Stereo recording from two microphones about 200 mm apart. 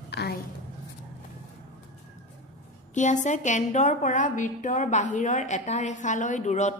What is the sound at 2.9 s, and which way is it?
A woman's voice, 35° left (ahead or behind).